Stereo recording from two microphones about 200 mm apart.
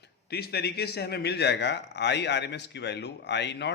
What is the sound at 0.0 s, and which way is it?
Speech, 50° left (ahead or behind).